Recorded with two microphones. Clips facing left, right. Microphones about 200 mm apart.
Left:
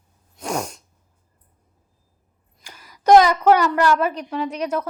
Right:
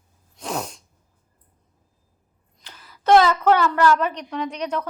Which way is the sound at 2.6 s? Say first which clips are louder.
Left 3 dB; 10° left (ahead or behind).